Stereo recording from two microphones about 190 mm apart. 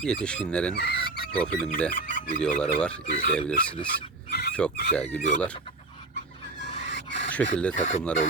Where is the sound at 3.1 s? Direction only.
50° left (ahead or behind).